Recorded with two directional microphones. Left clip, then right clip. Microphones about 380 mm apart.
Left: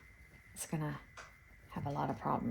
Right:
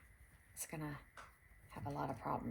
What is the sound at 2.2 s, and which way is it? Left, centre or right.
Speech, left.